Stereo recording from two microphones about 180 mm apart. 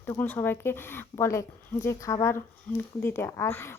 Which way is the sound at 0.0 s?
10° left (ahead or behind).